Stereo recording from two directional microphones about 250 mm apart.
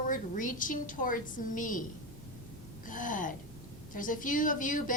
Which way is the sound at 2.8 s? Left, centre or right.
Left.